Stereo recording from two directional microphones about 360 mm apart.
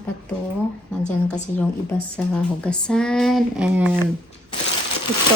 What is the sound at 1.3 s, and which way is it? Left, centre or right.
A woman's voice, centre.